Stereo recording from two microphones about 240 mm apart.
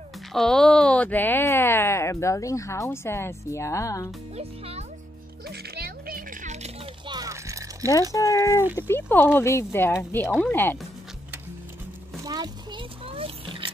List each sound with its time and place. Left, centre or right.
0.3 s speech: centre
4.4 s a child's voice: right
5.5 s music: right; by 7.9 s centre
8.1 s speech: centre
12.3 s a sound: centre